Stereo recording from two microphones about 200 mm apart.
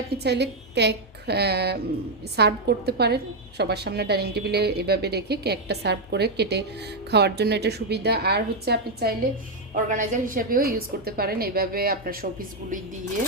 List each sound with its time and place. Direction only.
0.2 s a woman's voice: 55° right (ahead or behind)
9.7 s a woman's voice: 40° right (ahead or behind)